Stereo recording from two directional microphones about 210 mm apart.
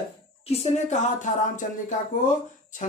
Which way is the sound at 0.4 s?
30° left (ahead or behind).